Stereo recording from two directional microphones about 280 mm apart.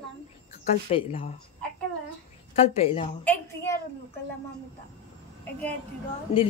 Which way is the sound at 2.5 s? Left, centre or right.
Left.